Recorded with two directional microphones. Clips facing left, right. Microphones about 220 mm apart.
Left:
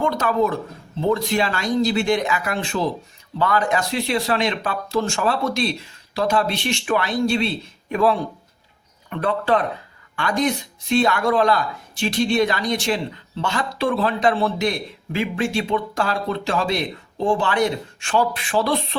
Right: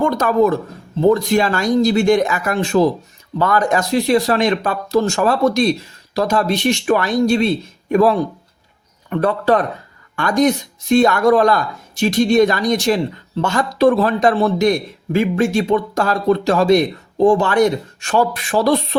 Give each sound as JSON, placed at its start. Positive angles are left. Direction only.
{"t": 0.0, "sound": "speech", "side_deg": -45}